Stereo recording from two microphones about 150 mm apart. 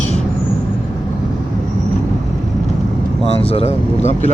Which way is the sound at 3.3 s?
40° left (ahead or behind).